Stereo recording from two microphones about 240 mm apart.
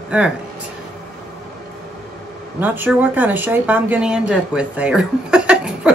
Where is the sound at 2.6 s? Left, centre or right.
Centre.